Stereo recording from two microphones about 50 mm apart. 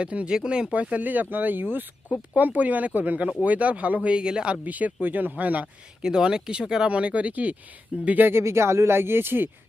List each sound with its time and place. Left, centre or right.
0.0 s speech: right
0.7 s speech: right
4.6 s speech: right
6.0 s speech: centre; by 8.3 s right
8.3 s speech: right